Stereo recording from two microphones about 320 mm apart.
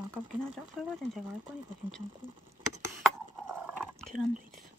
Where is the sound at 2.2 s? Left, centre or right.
Right.